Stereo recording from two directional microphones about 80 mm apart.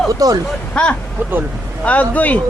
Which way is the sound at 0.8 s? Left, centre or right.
Centre.